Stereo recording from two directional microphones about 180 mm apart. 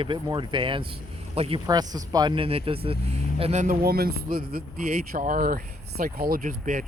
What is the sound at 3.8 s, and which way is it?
Speech, 60° right (ahead or behind).